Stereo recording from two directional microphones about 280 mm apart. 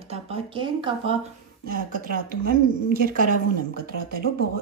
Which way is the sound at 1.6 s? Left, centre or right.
Right.